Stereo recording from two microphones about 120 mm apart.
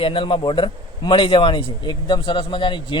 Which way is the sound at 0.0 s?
45° left (ahead or behind).